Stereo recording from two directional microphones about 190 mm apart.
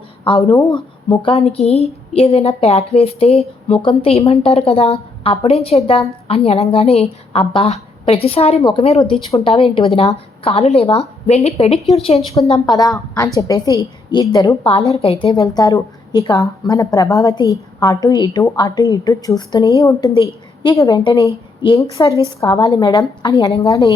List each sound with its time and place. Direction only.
0.3 s a woman's voice: 25° left (ahead or behind)
12.5 s a woman's voice: 20° left (ahead or behind)